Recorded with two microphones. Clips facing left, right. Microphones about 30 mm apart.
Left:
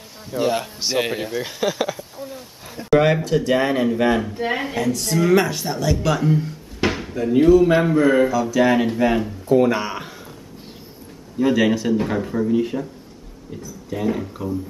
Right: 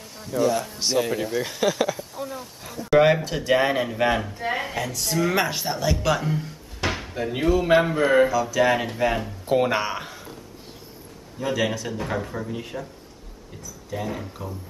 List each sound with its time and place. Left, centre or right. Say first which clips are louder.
0.4 s speech: left 1 dB; left
0.7 s speech: left 1 dB; centre
1.3 s a sound: even; centre
2.9 s speech: left 2 dB; centre
4.4 s speech: left 4 dB; centre
4.6 s speech: left 5 dB; centre
6.9 s a sound: left 3 dB; centre
7.2 s speech: left 9 dB; centre
8.3 s speech: left 3 dB; centre
9.6 s speech: left 4 dB; centre
9.8 s speech: left 1 dB; centre
11.3 s speech: left 7 dB; centre
13.8 s speech: left 7 dB; centre